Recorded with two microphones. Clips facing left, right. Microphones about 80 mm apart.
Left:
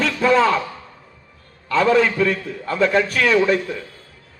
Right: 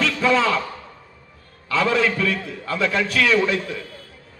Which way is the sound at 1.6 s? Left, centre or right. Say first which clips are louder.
Left 4 dB; left.